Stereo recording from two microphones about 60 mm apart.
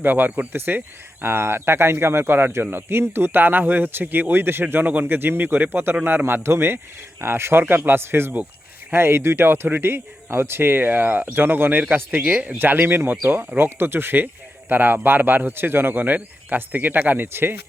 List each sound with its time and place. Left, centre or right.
0.0 s speech: right